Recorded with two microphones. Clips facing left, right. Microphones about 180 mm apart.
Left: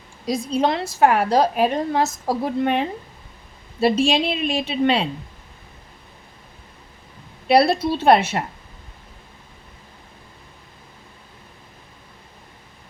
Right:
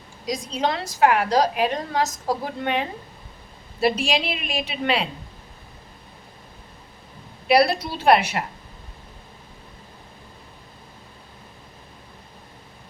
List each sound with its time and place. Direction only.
0.6 s a woman's voice: 25° left (ahead or behind)
7.4 s a woman's voice: 25° left (ahead or behind)